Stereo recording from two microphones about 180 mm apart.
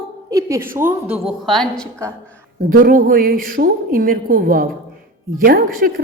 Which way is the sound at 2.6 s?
50° right (ahead or behind).